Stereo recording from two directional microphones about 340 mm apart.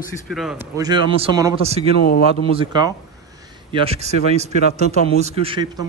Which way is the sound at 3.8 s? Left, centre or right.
Centre.